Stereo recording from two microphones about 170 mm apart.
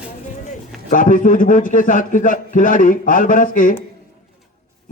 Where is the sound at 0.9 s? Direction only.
50° left (ahead or behind).